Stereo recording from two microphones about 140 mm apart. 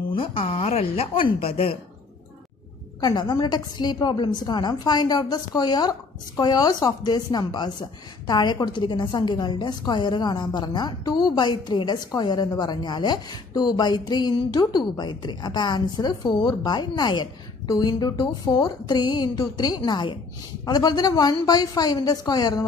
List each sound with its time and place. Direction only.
0.1 s a woman's voice: 40° left (ahead or behind)
3.0 s a woman's voice: 30° left (ahead or behind)